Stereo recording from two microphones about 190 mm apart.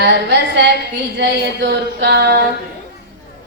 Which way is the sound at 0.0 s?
65° right (ahead or behind).